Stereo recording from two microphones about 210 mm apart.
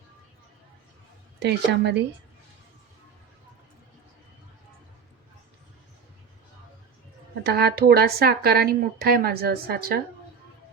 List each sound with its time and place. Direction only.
1.4 s a woman's voice: 55° right (ahead or behind)
7.4 s speech: 50° right (ahead or behind)